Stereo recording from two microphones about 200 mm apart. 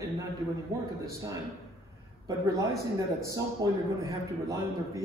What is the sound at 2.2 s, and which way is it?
A man's voice, 15° right (ahead or behind).